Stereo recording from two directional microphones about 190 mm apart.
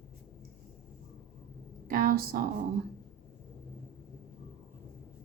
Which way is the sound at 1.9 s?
50° right (ahead or behind).